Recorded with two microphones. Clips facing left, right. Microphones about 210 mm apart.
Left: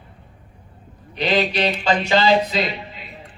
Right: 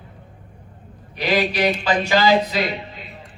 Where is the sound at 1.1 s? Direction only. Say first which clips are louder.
Left 1 dB; 25° left (ahead or behind).